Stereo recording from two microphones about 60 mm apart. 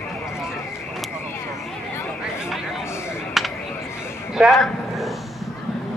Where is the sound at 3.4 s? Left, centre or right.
Centre.